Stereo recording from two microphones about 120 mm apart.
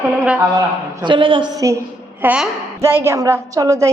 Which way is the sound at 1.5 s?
25° right (ahead or behind).